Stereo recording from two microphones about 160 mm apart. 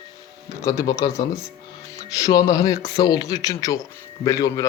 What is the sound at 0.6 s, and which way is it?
Speech, 20° left (ahead or behind).